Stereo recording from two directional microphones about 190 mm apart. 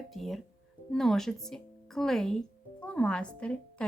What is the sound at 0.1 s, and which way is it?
A woman's voice, centre (ahead or behind).